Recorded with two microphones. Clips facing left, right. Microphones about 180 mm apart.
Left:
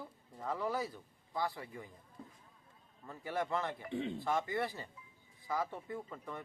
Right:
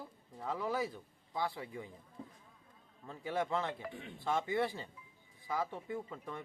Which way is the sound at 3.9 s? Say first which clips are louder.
Left 10 dB; 20° left (ahead or behind).